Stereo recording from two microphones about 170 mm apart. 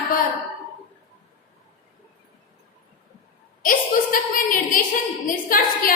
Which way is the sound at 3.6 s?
55° left (ahead or behind).